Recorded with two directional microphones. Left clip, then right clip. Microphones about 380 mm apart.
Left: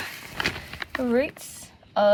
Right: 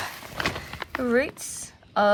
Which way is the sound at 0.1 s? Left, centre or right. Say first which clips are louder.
Even; centre.